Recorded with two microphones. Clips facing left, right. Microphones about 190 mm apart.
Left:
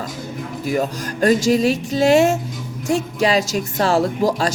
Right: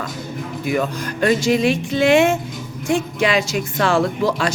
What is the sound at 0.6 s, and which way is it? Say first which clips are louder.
A woman's voice: even; 40° left (ahead or behind).